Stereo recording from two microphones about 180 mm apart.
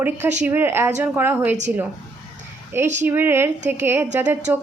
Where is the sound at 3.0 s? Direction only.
10° right (ahead or behind).